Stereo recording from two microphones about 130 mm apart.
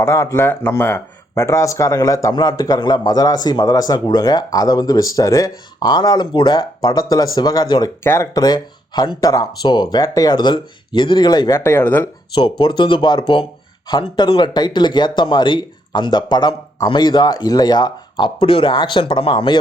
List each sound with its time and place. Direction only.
0.0 s speech: 25° left (ahead or behind)
12.3 s speech: 40° left (ahead or behind)